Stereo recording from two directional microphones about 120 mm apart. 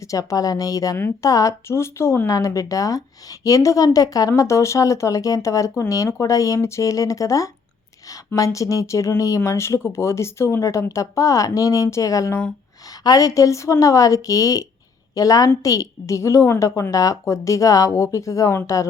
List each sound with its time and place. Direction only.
0.1 s speech: 30° left (ahead or behind)